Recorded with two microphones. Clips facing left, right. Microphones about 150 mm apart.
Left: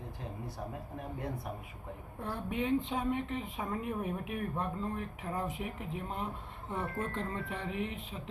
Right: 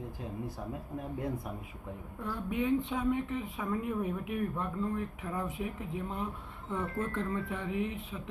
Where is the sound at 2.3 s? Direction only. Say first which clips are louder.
Right 2 dB; 20° left (ahead or behind).